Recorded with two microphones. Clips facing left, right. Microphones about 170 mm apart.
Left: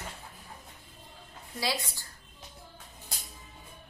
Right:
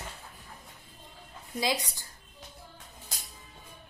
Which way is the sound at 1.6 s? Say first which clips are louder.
Right 3 dB; 20° right (ahead or behind).